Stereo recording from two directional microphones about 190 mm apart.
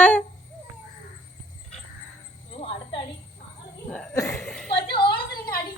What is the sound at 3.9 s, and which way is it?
Laughter, 5° left (ahead or behind).